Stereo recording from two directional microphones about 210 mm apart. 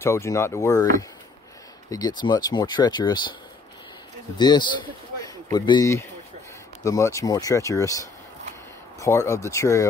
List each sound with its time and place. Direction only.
0.0 s speech: 15° left (ahead or behind)
1.9 s speech: 20° left (ahead or behind)
4.4 s speech: 20° left (ahead or behind)